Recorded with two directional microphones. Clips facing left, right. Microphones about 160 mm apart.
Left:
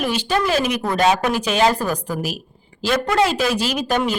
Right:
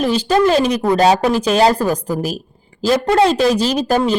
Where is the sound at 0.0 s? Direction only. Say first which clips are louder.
Right 6 dB; 35° right (ahead or behind).